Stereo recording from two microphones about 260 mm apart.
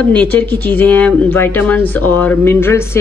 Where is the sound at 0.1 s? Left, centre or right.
Centre.